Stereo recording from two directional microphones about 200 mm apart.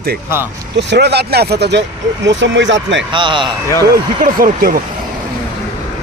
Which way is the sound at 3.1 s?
25° right (ahead or behind).